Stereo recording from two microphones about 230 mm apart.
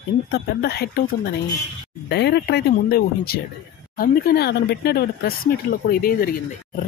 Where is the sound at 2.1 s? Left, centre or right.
Left.